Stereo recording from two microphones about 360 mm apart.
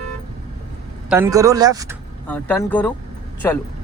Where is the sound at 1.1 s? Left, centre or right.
Centre.